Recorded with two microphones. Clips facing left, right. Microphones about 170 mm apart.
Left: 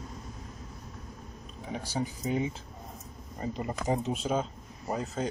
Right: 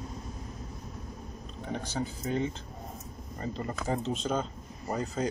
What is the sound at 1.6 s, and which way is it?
A man's voice, 10° left (ahead or behind).